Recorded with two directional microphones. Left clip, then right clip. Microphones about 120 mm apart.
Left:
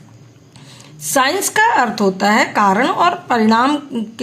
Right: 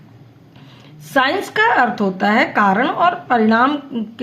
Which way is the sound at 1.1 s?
35° left (ahead or behind).